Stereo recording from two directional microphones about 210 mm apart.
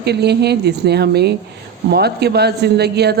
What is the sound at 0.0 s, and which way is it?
Speech, 50° right (ahead or behind).